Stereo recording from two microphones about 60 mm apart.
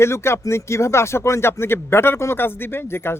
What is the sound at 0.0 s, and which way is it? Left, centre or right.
A man's voice, left.